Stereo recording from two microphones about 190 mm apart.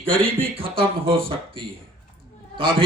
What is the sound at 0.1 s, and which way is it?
A man's voice, 30° right (ahead or behind).